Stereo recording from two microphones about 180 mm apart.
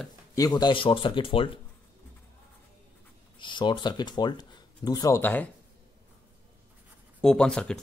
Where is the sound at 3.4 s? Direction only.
25° left (ahead or behind); by 5.5 s 10° left (ahead or behind).